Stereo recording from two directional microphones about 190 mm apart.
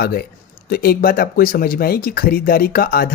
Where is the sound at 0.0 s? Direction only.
55° left (ahead or behind).